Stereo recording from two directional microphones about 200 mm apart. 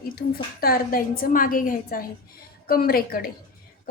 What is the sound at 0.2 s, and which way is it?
A woman's voice, 50° left (ahead or behind).